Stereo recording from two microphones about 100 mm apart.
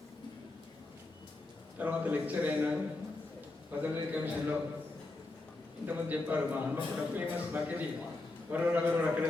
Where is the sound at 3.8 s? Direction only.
15° right (ahead or behind).